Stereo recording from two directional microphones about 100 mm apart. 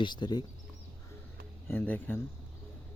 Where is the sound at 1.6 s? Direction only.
20° left (ahead or behind).